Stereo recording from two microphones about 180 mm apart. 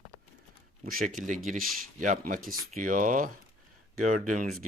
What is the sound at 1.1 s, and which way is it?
Speech, 45° right (ahead or behind).